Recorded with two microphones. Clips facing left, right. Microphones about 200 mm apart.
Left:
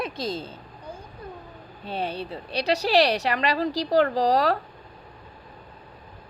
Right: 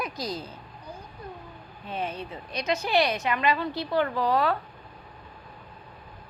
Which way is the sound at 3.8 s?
90° left.